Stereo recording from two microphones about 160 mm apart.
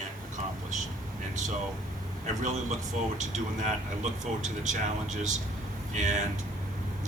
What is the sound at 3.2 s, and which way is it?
Speech, 50° right (ahead or behind).